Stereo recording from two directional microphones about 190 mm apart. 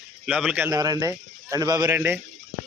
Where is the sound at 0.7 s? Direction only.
20° right (ahead or behind).